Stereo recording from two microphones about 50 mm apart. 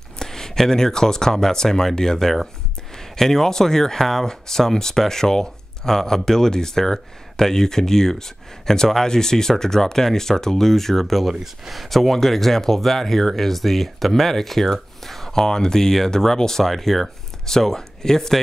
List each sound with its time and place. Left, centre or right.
0.2 s speech: centre